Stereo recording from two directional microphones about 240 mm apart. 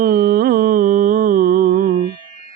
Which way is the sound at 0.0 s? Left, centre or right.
Right.